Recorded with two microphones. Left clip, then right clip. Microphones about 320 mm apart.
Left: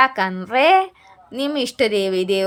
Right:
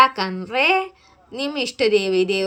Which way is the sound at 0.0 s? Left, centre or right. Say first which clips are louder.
Right 1 dB; centre.